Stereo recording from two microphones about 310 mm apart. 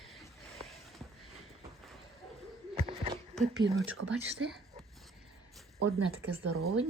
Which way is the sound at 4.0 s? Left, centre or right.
Right.